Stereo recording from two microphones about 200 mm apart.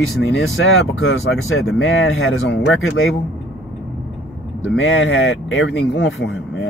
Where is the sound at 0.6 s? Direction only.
80° left.